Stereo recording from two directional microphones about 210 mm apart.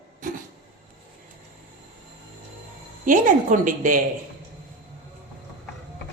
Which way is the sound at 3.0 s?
40° right (ahead or behind).